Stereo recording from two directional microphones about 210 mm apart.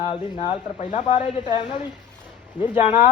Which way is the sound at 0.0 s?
25° left (ahead or behind).